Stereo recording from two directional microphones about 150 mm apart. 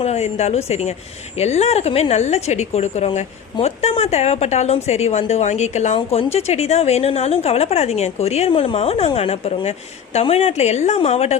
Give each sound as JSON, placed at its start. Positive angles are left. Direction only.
{"t": 0.0, "sound": "a woman's voice", "side_deg": 45}